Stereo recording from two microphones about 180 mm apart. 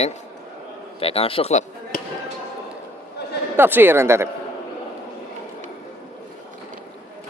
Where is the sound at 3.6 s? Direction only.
10° right (ahead or behind).